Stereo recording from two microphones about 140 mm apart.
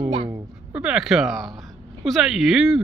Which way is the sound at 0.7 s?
5° right (ahead or behind).